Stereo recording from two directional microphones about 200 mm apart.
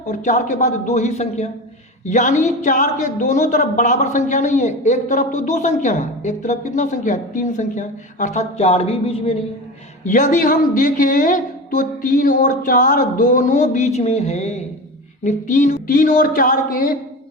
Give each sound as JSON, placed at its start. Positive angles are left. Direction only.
{"t": 0.0, "sound": "speech", "side_deg": 40}